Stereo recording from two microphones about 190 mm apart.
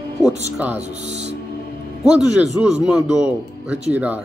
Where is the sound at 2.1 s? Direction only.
5° right (ahead or behind).